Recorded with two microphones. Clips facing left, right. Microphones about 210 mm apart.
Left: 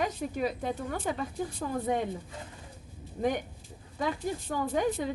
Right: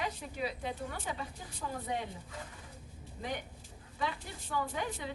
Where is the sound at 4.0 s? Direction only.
45° left (ahead or behind).